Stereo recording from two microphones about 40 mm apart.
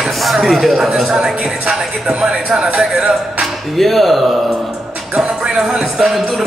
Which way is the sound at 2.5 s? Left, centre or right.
Right.